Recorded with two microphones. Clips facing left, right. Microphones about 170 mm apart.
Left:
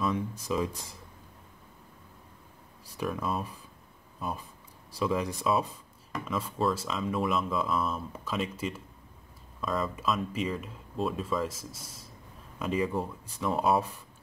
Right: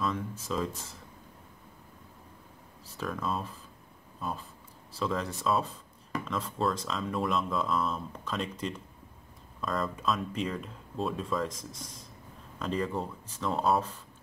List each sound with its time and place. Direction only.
0.0 s speech: 15° left (ahead or behind)
2.8 s speech: 15° left (ahead or behind)